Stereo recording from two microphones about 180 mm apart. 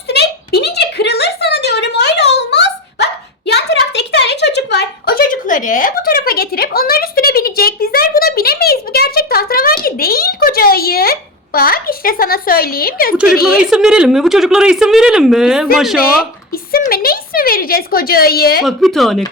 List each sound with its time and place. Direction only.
0.1 s a sound: 65° left (ahead or behind)
13.7 s speech: 5° right (ahead or behind)
16.5 s speech: 55° left (ahead or behind)
18.6 s speech: centre (ahead or behind)